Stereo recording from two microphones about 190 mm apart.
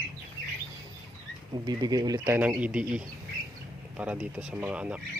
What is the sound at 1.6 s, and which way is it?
Speech, 20° right (ahead or behind).